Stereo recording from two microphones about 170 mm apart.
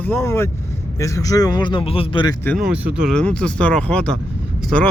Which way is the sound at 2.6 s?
10° right (ahead or behind).